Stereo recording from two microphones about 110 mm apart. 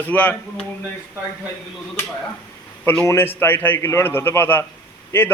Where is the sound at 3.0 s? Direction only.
20° left (ahead or behind).